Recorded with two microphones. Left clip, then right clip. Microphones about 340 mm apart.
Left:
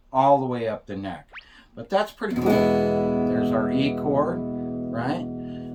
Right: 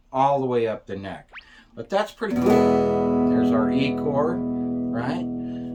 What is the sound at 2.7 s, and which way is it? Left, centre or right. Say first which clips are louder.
Music: right 2 dB; centre.